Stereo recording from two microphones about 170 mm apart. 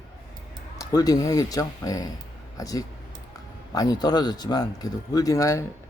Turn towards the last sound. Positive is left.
turn(degrees=20)  # may be behind; listen again after turning